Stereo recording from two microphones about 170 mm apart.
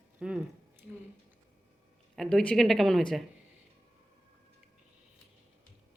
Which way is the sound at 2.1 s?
Centre (ahead or behind).